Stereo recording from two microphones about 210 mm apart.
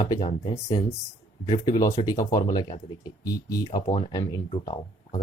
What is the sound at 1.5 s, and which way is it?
Speech, 20° left (ahead or behind).